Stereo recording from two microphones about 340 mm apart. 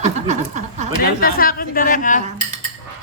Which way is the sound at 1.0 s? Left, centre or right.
Left.